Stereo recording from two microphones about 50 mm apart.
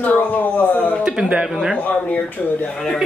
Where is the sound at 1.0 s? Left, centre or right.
Centre.